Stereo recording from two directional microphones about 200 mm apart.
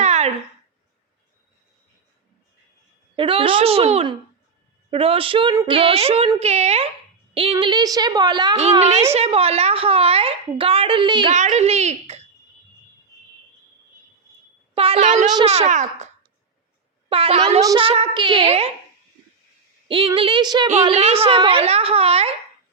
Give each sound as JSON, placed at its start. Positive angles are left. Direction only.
{"t": 0.0, "sound": "a sound", "side_deg": -35}
{"t": 3.2, "sound": "a woman's voice", "side_deg": -25}
{"t": 11.3, "sound": "a child's voice", "side_deg": -35}
{"t": 14.8, "sound": "a child's voice", "side_deg": -30}
{"t": 15.3, "sound": "a child's voice", "side_deg": -25}
{"t": 19.9, "sound": "a woman's voice", "side_deg": -25}